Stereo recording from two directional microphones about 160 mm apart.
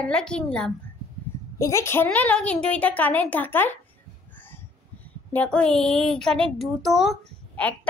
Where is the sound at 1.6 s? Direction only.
15° left (ahead or behind).